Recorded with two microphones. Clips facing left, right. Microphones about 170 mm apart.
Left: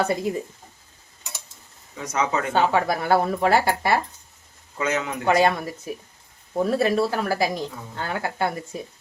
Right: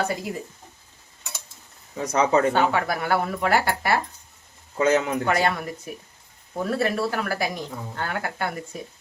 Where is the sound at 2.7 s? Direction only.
25° left (ahead or behind).